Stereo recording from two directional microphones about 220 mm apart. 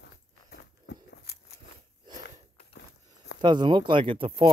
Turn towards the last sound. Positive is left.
turn(degrees=-25)  # may be behind; listen again after turning